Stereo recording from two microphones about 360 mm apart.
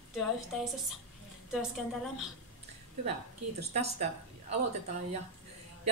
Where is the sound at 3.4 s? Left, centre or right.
Right.